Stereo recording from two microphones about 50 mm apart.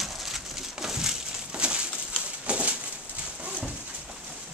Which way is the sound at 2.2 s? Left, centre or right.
Right.